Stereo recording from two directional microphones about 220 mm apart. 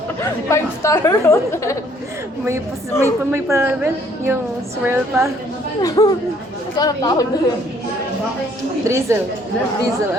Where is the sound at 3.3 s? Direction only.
10° right (ahead or behind).